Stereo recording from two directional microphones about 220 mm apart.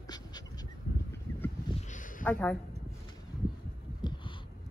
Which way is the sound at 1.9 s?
35° left (ahead or behind).